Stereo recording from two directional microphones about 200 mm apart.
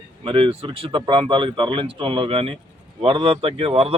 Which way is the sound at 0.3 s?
25° right (ahead or behind).